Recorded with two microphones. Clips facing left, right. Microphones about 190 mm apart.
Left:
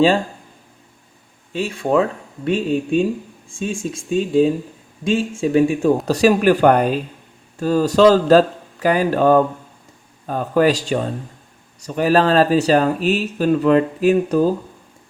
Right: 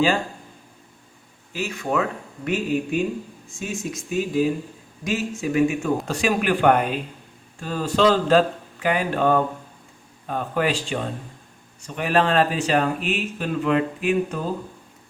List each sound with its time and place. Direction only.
1.5 s speech: 30° left (ahead or behind)
11.9 s speech: 35° left (ahead or behind)